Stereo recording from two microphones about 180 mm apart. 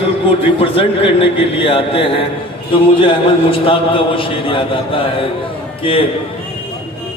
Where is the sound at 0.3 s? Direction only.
30° left (ahead or behind).